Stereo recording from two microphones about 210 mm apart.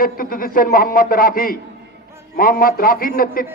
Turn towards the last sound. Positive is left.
turn(degrees=45)  # may be behind; listen again after turning